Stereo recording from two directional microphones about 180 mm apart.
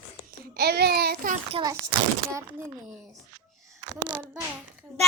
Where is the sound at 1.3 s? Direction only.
30° right (ahead or behind).